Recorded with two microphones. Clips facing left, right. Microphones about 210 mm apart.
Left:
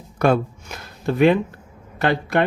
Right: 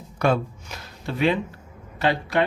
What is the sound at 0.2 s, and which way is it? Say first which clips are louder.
Speech: left 4 dB; 50° left (ahead or behind).